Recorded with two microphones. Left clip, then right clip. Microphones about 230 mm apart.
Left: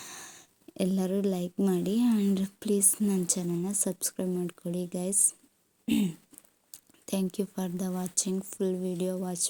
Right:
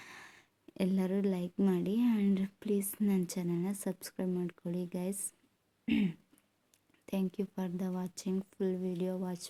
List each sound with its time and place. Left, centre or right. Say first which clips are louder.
0.0 s speech: left 6 dB; centre
5.8 s throat clearing: left 4 dB; centre
7.0 s speech: left 5 dB; centre